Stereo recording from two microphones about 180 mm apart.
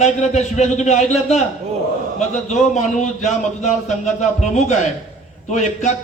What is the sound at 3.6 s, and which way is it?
A man's voice, 40° left (ahead or behind).